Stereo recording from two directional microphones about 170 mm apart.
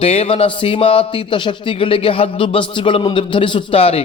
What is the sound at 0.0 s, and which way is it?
Speech, 35° left (ahead or behind).